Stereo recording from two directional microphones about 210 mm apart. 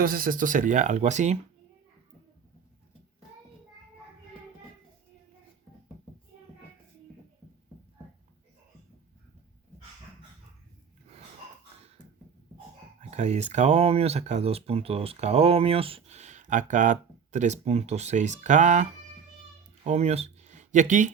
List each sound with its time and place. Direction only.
0.0 s speech: 45° right (ahead or behind)
13.0 s speech: 35° right (ahead or behind)